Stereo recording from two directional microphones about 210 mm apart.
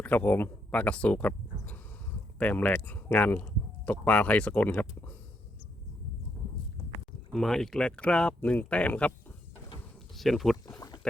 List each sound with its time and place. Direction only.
0.0 s speech: 10° left (ahead or behind)
7.3 s speech: centre (ahead or behind)
10.2 s speech: centre (ahead or behind)
10.7 s a sound: 15° left (ahead or behind)